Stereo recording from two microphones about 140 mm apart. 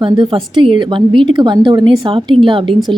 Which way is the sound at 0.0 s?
35° right (ahead or behind).